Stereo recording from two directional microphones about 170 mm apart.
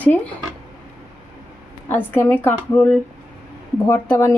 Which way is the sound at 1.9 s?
10° left (ahead or behind).